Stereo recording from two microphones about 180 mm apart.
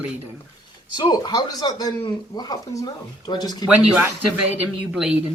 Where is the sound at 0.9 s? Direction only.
25° left (ahead or behind).